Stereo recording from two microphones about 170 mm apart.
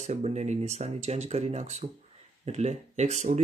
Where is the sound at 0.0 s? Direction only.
40° right (ahead or behind).